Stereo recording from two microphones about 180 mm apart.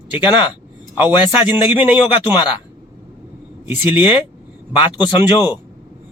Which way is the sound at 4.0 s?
25° left (ahead or behind).